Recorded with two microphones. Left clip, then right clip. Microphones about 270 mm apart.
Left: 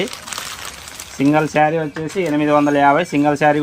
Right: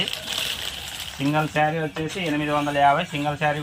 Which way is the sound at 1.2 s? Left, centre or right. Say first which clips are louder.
Left 8 dB; left.